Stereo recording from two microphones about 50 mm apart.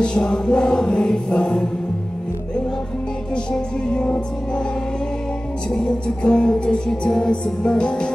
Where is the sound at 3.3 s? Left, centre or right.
Centre.